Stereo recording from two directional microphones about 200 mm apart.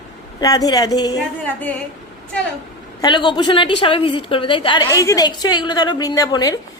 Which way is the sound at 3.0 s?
25° left (ahead or behind).